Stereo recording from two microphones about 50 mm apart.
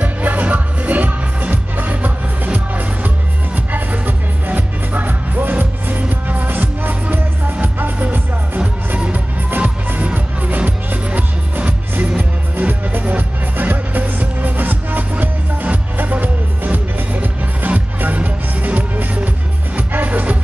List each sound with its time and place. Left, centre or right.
0.0 s music: right
8.5 s music: right
12.2 s music: right